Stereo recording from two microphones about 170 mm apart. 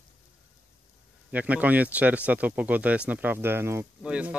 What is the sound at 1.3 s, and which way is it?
Speech, 10° right (ahead or behind).